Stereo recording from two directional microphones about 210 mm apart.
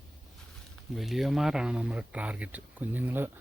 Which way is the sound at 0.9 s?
Centre (ahead or behind).